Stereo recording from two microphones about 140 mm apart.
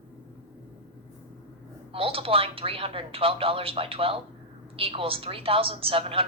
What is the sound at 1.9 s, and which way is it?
A woman's voice, 40° right (ahead or behind).